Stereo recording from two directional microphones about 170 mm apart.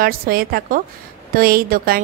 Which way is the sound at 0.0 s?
60° right (ahead or behind).